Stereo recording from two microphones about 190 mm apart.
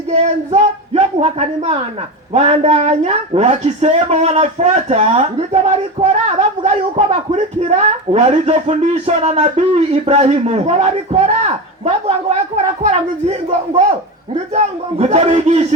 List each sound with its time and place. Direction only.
0.1 s speech: 35° right (ahead or behind)
14.3 s speech: 35° right (ahead or behind)